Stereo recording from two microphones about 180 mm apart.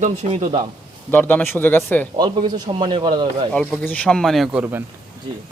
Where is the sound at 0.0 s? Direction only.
40° right (ahead or behind).